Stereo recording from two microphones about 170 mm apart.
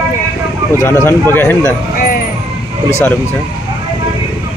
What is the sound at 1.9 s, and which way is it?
Vehicle, 55° left (ahead or behind).